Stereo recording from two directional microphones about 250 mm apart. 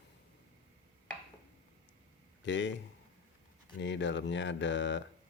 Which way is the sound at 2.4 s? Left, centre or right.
Left.